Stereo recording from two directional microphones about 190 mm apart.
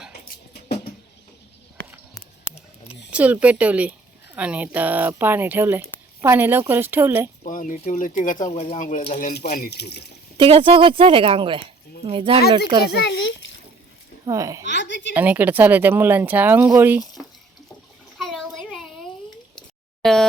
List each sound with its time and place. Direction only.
2.4 s a sound: 5° right (ahead or behind)
3.1 s speech: 5° right (ahead or behind)
7.4 s speech: 45° left (ahead or behind)
9.6 s speech: 60° left (ahead or behind)
10.3 s speech: 25° right (ahead or behind)
12.9 s a child's voice: 80° left
14.3 s speech: 15° right (ahead or behind)
14.6 s a woman's voice: 70° left (ahead or behind)
15.1 s speech: 10° right (ahead or behind)
18.2 s a sound: centre (ahead or behind)